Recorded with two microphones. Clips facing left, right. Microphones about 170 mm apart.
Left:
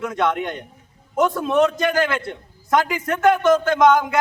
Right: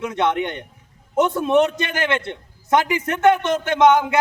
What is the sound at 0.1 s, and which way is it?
A man's voice, 25° right (ahead or behind).